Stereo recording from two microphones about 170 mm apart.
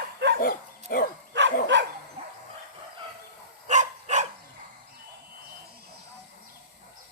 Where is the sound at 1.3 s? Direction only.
90° right.